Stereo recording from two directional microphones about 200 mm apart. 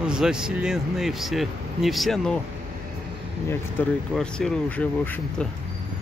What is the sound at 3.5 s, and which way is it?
Speech, 5° left (ahead or behind).